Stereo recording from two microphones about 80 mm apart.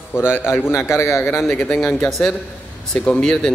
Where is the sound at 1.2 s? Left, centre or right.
Centre.